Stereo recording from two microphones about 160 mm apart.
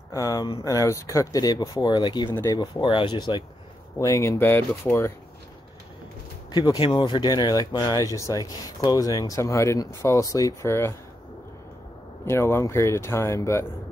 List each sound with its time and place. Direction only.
0.1 s speech: 20° left (ahead or behind)
4.0 s speech: 20° left (ahead or behind)
6.5 s speech: 20° left (ahead or behind)
12.3 s speech: 15° left (ahead or behind)